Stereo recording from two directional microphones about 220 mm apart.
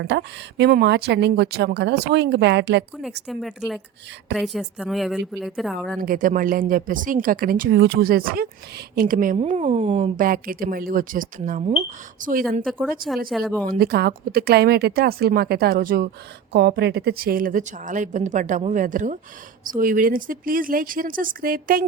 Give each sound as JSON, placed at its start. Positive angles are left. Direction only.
{"t": 0.0, "sound": "speech", "side_deg": -50}
{"t": 3.2, "sound": "speech", "side_deg": 0}
{"t": 6.0, "sound": "a woman's voice", "side_deg": -40}
{"t": 13.3, "sound": "speech", "side_deg": 0}
{"t": 13.7, "sound": "a woman's voice", "side_deg": -45}